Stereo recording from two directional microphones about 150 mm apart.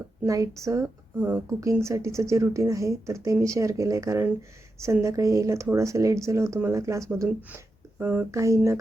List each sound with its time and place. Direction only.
0.3 s a woman's voice: 20° right (ahead or behind)